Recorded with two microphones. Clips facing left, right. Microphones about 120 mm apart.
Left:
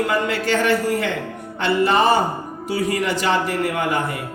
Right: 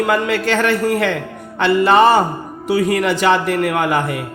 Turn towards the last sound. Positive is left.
turn(degrees=-80)